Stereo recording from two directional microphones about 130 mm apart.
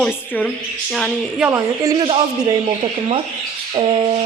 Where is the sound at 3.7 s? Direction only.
40° right (ahead or behind).